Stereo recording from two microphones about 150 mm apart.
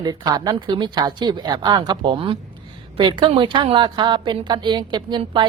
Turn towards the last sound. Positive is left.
turn(degrees=-30)  # may be behind; listen again after turning